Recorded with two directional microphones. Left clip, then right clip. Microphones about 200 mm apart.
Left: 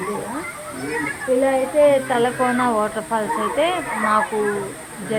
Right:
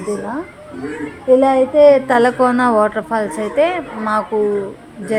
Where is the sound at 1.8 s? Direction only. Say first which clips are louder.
Right 6 dB; 25° right (ahead or behind).